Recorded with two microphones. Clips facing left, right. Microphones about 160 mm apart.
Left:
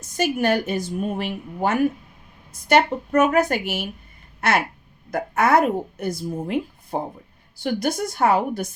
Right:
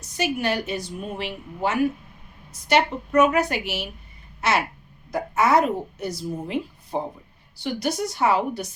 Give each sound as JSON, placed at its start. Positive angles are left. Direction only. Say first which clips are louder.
{"t": 0.0, "sound": "a woman's voice", "louder": "left 4 dB", "side_deg": 50}
{"t": 4.4, "sound": "a sound", "louder": "left 2 dB", "side_deg": 55}
{"t": 5.1, "sound": "a woman's voice", "louder": "left 1 dB", "side_deg": 55}